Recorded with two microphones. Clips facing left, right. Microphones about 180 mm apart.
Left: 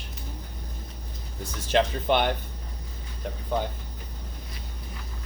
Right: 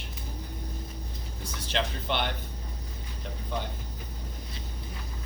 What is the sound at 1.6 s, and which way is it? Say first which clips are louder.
Speech: left 8 dB; 50° left (ahead or behind).